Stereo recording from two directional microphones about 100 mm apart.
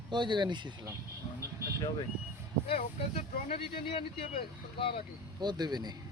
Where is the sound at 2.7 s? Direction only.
80° left; by 5.0 s 60° left (ahead or behind).